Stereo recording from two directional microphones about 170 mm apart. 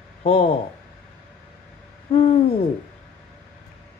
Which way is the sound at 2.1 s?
35° left (ahead or behind).